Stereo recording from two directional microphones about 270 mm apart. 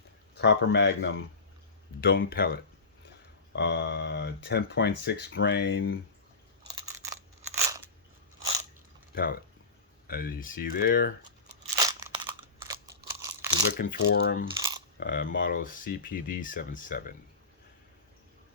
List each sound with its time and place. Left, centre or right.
0.3 s speech: left
3.5 s speech: left
7.5 s crunch: centre
9.1 s speech: left
11.9 s crunch: centre
13.7 s speech: left